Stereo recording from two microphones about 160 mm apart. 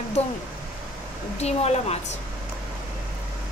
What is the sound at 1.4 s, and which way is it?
Speech, 40° left (ahead or behind).